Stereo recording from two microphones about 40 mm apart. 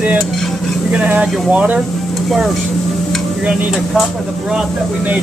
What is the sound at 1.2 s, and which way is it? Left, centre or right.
Speech, right.